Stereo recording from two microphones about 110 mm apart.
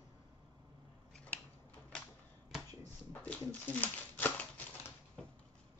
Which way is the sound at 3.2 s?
15° left (ahead or behind).